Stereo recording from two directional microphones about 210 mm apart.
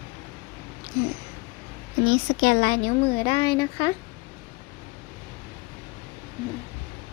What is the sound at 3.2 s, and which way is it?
Speech, 20° left (ahead or behind).